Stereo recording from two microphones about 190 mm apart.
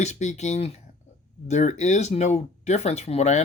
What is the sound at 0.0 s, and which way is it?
Speech, 35° left (ahead or behind).